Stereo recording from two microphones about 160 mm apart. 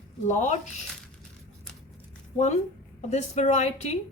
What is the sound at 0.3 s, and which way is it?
Speech, 50° left (ahead or behind).